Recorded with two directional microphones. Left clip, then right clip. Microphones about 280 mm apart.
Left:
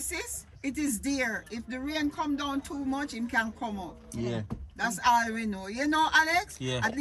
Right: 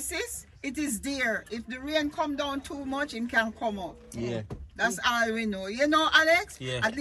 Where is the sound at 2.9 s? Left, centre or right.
Centre.